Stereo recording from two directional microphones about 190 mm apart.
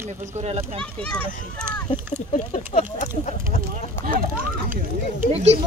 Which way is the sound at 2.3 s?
35° left (ahead or behind).